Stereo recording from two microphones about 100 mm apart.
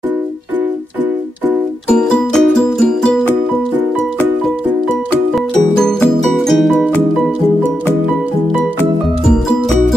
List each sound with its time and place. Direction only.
1.9 s music: 10° left (ahead or behind)
5.3 s music: 5° left (ahead or behind)